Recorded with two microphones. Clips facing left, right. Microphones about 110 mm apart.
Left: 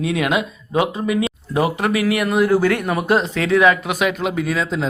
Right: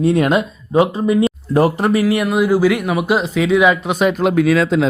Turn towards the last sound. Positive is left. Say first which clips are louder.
# right 8 dB
turn(degrees=0)  # may be behind; listen again after turning